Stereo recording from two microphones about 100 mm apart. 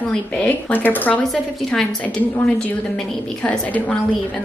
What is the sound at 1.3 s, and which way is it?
Speech, 5° left (ahead or behind).